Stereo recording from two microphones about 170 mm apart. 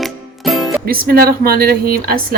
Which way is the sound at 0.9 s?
60° right (ahead or behind).